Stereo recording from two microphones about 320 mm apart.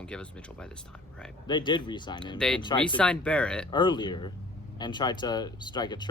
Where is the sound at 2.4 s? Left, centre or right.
Centre.